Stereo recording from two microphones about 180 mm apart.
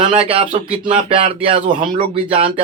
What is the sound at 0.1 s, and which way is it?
Speech, 35° right (ahead or behind).